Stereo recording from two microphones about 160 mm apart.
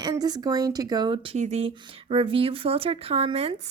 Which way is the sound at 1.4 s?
40° right (ahead or behind).